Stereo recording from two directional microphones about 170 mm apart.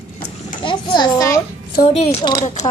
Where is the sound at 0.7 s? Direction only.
25° left (ahead or behind).